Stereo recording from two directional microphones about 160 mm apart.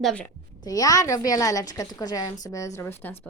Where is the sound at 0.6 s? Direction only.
20° left (ahead or behind).